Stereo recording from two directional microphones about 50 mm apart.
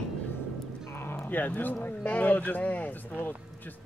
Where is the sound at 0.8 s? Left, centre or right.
Left.